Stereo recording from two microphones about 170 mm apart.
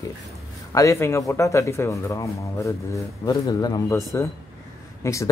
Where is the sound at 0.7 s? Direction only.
20° left (ahead or behind).